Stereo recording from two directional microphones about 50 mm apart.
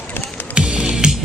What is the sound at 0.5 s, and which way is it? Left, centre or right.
Music, centre.